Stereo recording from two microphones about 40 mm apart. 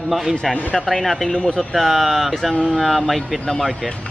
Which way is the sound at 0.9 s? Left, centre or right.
Centre.